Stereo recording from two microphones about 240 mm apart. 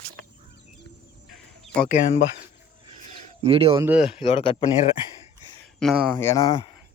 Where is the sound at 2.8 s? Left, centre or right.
Right.